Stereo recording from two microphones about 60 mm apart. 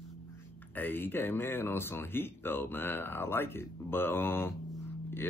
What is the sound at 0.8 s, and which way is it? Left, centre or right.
Speech, left.